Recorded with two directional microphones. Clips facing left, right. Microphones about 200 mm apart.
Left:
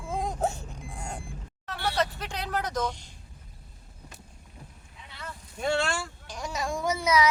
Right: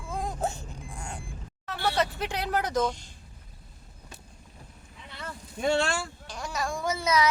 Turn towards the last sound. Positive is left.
turn(degrees=10)  # may be behind; listen again after turning